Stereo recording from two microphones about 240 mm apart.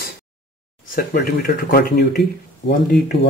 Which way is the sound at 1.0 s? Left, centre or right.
Left.